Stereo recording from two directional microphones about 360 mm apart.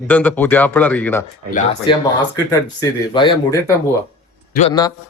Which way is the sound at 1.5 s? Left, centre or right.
Left.